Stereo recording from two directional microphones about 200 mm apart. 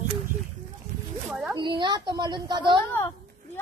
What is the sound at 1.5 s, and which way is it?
A child's voice, 20° right (ahead or behind).